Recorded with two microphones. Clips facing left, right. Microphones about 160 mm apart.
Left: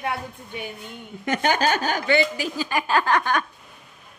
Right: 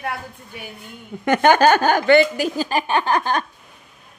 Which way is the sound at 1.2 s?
65° right (ahead or behind).